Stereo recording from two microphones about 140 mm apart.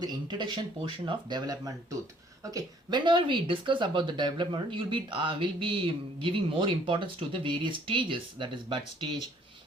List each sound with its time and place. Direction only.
0.0 s speech: 30° right (ahead or behind)